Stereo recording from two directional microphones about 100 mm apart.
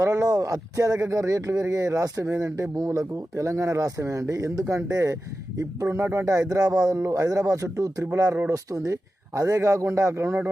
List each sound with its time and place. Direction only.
0.0 s speech: 35° right (ahead or behind)